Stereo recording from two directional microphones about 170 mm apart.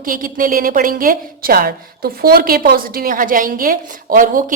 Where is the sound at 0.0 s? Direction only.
55° right (ahead or behind).